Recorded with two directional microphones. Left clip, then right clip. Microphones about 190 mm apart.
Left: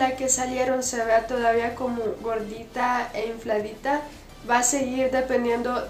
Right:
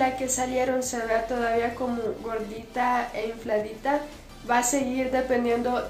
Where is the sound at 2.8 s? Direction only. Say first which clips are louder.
Left 1 dB; 5° left (ahead or behind).